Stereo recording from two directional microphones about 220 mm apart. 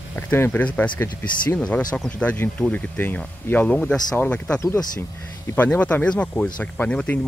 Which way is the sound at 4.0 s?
20° left (ahead or behind).